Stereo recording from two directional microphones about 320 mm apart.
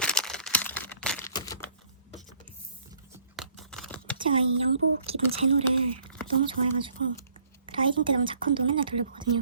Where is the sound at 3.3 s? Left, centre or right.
Centre.